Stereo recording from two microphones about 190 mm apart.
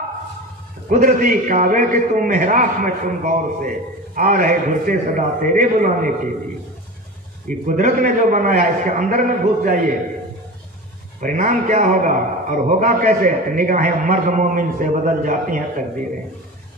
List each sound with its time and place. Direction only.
0.8 s a man's voice: 45° right (ahead or behind)
7.4 s a man's voice: 45° right (ahead or behind)
11.1 s a man's voice: 45° right (ahead or behind)